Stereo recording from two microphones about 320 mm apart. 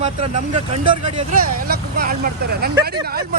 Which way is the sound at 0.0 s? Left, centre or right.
Right.